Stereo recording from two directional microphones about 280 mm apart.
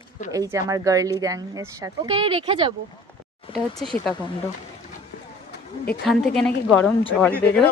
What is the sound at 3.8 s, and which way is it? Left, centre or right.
Speech, centre.